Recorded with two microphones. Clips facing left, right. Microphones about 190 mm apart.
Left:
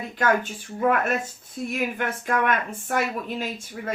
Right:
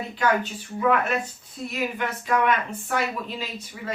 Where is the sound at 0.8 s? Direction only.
45° left (ahead or behind).